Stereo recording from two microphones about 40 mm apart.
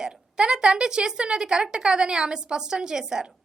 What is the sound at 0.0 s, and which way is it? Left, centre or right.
A woman's voice, centre.